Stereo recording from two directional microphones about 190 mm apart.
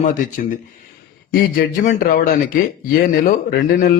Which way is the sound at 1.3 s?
45° left (ahead or behind).